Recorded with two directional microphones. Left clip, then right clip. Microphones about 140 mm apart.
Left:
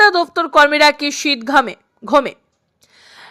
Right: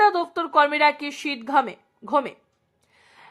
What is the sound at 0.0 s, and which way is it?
Speech, 25° left (ahead or behind).